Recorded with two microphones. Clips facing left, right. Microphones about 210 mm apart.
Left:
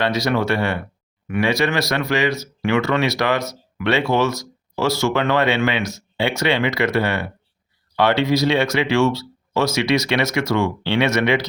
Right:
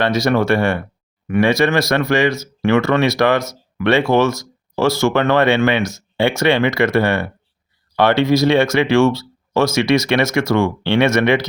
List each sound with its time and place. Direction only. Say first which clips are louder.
0.0 s speech: right 4 dB; 50° right (ahead or behind)